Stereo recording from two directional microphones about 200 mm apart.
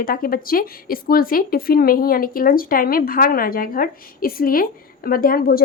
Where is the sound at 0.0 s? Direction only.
45° left (ahead or behind).